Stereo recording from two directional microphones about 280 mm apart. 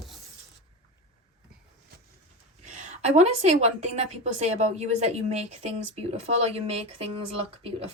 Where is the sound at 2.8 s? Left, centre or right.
Right.